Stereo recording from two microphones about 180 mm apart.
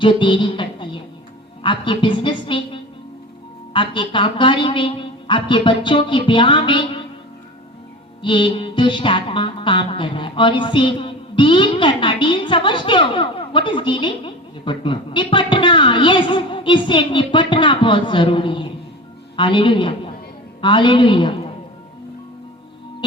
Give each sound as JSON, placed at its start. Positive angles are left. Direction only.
{"t": 0.0, "sound": "music", "side_deg": 25}
{"t": 1.6, "sound": "a woman's voice", "side_deg": 25}
{"t": 3.7, "sound": "music", "side_deg": 30}
{"t": 8.2, "sound": "music", "side_deg": 25}
{"t": 20.6, "sound": "a man's voice", "side_deg": 25}